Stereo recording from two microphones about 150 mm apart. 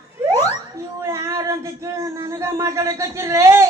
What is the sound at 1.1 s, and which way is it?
Speech, 20° right (ahead or behind).